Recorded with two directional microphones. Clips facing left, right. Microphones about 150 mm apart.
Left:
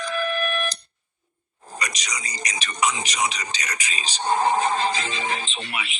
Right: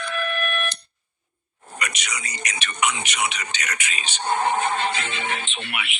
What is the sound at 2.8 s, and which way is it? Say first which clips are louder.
Speech: left 1 dB; 35° left (ahead or behind).